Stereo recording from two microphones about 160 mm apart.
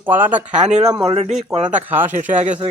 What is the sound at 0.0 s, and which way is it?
Speech, 10° right (ahead or behind).